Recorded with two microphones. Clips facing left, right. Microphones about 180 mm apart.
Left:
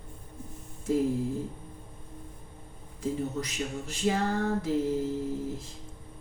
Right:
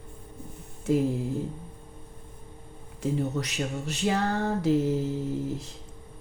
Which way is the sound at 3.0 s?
75° right (ahead or behind).